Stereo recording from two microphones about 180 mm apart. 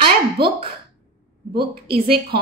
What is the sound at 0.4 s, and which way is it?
Speech, 60° right (ahead or behind).